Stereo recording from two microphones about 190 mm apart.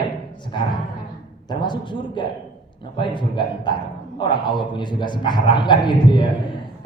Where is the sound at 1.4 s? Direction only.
25° left (ahead or behind).